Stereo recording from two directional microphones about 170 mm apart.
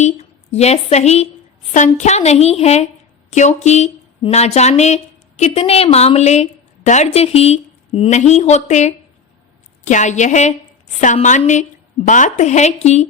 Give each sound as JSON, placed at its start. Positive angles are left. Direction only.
{"t": 0.0, "sound": "a woman's voice", "side_deg": 40}